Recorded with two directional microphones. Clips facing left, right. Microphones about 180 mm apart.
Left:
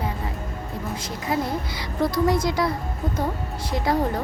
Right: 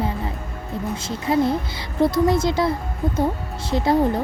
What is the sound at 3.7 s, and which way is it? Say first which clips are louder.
Speech: right 4 dB; 30° right (ahead or behind).